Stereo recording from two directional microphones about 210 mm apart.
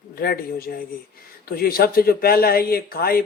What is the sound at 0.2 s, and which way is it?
Speech, 45° left (ahead or behind).